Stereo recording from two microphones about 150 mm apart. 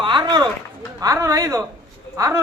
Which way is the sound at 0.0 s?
30° right (ahead or behind).